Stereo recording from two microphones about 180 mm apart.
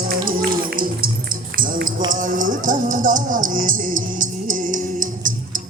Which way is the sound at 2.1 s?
45° right (ahead or behind).